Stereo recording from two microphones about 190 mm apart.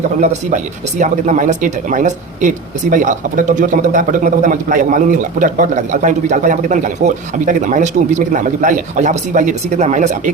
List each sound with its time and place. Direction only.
0.2 s speech: 40° right (ahead or behind)